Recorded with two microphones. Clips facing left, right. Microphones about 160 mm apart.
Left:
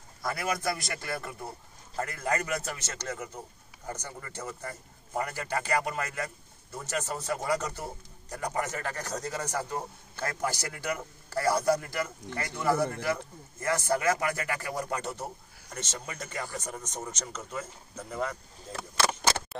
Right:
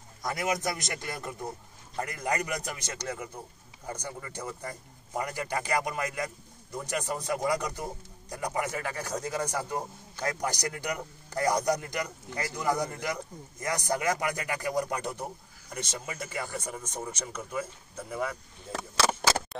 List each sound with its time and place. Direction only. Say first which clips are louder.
0.2 s a man's voice: right 1 dB; 20° right (ahead or behind)